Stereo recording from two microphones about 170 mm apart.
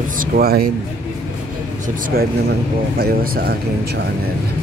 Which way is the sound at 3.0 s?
65° right (ahead or behind).